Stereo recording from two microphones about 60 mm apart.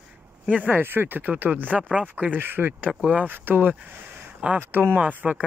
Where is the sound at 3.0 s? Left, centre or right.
Right.